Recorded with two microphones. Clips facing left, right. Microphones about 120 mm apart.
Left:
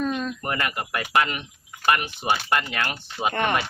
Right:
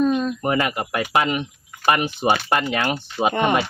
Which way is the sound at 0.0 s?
15° right (ahead or behind).